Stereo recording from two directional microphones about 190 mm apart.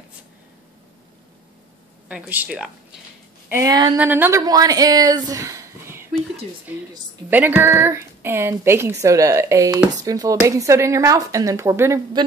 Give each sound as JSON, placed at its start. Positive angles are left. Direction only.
{"t": 2.0, "sound": "a woman's voice", "side_deg": -10}
{"t": 7.2, "sound": "a woman's voice", "side_deg": -10}